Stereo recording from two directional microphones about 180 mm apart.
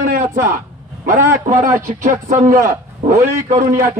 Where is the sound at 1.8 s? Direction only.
45° right (ahead or behind).